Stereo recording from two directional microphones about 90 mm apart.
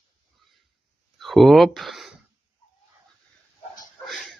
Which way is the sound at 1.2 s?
Centre (ahead or behind).